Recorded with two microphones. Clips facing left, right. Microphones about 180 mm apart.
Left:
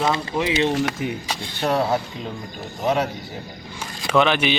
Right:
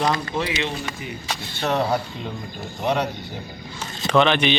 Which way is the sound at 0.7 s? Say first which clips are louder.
Left 8 dB; 85° left.